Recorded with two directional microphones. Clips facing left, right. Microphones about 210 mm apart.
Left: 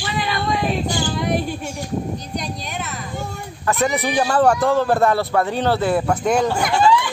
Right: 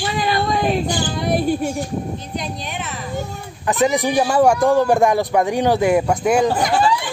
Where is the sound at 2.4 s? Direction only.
Centre (ahead or behind).